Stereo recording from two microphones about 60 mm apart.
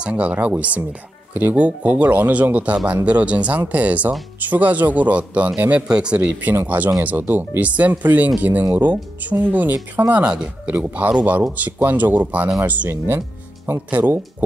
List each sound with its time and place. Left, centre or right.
0.0 s speech: centre
6.5 s speech: right
10.2 s speech: centre